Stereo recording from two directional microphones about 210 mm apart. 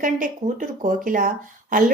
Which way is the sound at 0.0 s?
40° right (ahead or behind).